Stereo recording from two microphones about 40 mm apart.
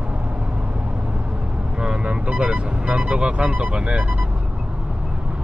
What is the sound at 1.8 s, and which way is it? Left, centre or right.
Speech, right.